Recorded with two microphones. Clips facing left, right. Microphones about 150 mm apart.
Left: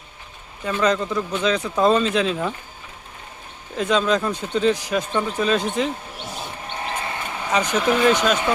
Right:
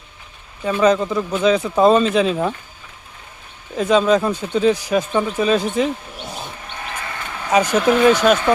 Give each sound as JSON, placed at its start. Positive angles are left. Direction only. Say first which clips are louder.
{"t": 0.6, "sound": "speech", "louder": "right 5 dB", "side_deg": -15}
{"t": 3.8, "sound": "speech", "louder": "right 5 dB", "side_deg": -5}
{"t": 6.7, "sound": "a sound", "louder": "left 2 dB", "side_deg": 30}
{"t": 7.5, "sound": "speech", "louder": "right 5 dB", "side_deg": -5}